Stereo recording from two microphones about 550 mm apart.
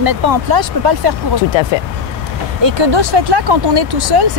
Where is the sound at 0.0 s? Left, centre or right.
Right.